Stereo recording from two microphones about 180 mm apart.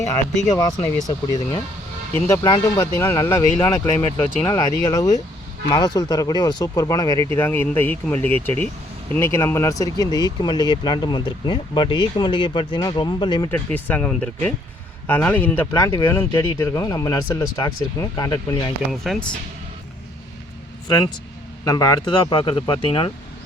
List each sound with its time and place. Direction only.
0.0 s speech: 15° left (ahead or behind)
13.7 s speech: 10° left (ahead or behind)
18.9 s speech: centre (ahead or behind)
21.6 s speech: 20° left (ahead or behind)